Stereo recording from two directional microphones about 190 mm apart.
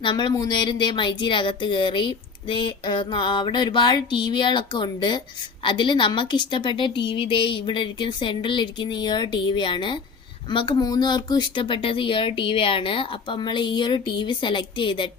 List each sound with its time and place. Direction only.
0.0 s speech: 25° left (ahead or behind)